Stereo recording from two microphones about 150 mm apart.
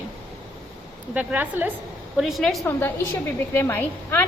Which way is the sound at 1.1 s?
10° right (ahead or behind).